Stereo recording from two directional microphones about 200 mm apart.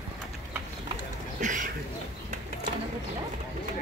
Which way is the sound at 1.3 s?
40° right (ahead or behind).